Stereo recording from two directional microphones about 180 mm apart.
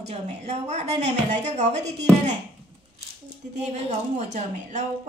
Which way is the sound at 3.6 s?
40° right (ahead or behind).